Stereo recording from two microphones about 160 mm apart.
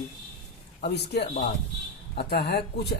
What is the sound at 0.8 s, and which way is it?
Speech, 90° left.